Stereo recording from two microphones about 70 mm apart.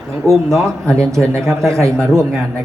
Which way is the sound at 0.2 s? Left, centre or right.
Right.